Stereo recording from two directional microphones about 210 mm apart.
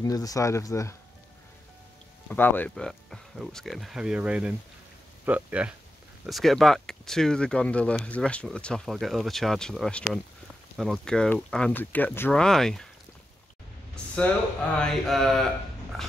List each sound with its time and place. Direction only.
0.0 s speech: 15° left (ahead or behind)
2.2 s speech: 10° left (ahead or behind)
14.8 s speech: centre (ahead or behind)
15.9 s dog: centre (ahead or behind)